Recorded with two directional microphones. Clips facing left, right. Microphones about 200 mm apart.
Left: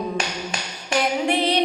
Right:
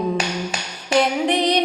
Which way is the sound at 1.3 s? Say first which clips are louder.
Right 2 dB; 15° right (ahead or behind).